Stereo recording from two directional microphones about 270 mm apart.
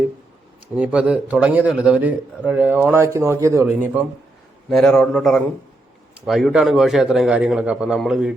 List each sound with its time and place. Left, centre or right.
0.8 s a man's voice: centre